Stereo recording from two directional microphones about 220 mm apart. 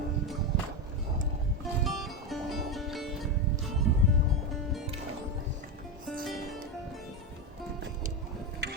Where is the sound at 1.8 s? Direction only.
Centre (ahead or behind).